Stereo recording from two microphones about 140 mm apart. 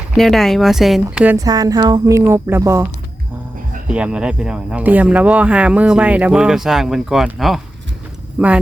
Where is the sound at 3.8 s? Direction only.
5° right (ahead or behind).